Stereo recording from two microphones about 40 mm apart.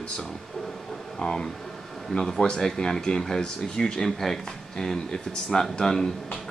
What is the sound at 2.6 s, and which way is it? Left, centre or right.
Speech, centre.